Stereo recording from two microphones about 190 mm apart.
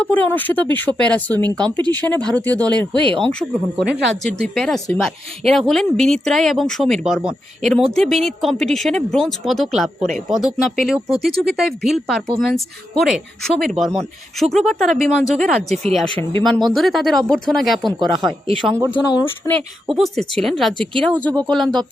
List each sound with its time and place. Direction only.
0.0 s a woman's voice: 10° left (ahead or behind)
3.0 s speech: 25° right (ahead or behind)
4.0 s a woman's voice: centre (ahead or behind)
17.8 s speech: 25° right (ahead or behind)
18.9 s speech: 25° left (ahead or behind)
19.9 s a woman's voice: centre (ahead or behind)